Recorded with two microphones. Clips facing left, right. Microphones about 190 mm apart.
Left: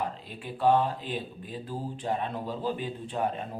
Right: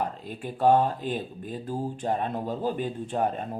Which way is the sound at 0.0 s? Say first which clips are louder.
Right 3 dB; 45° right (ahead or behind).